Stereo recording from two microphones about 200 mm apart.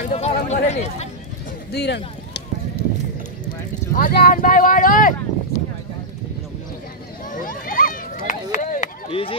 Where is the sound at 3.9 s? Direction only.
50° left (ahead or behind).